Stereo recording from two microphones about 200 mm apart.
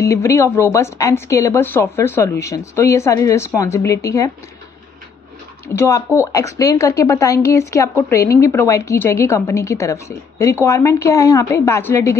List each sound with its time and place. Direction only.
0.0 s a woman's voice: 15° left (ahead or behind)
5.8 s a woman's voice: 15° left (ahead or behind)